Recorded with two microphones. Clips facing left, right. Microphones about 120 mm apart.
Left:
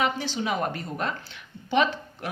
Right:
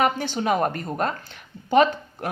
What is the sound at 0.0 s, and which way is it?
A woman's voice, 50° right (ahead or behind).